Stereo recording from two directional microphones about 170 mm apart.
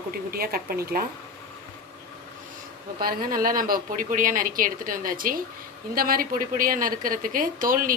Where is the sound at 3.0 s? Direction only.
60° right (ahead or behind).